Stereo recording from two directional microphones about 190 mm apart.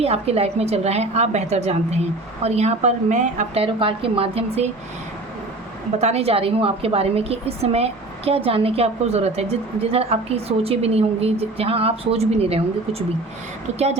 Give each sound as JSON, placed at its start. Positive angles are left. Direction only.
{"t": 0.0, "sound": "a woman's voice", "side_deg": -30}
{"t": 6.0, "sound": "a woman's voice", "side_deg": -35}